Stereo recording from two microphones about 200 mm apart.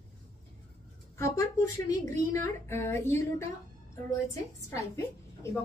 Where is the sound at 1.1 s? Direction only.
15° left (ahead or behind).